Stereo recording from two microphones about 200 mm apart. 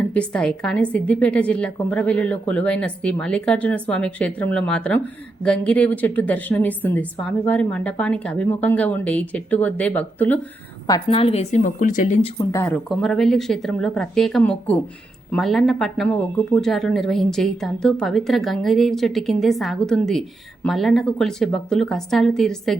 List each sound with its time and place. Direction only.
0.1 s a woman's voice: 5° left (ahead or behind)
10.8 s speech: 25° left (ahead or behind)
12.4 s speech: 15° left (ahead or behind)